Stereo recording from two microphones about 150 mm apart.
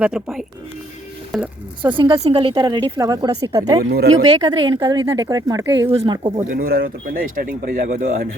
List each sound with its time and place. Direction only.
0.0 s speech: 5° right (ahead or behind)
1.8 s a woman's voice: 35° right (ahead or behind)
6.5 s speech: 75° right (ahead or behind)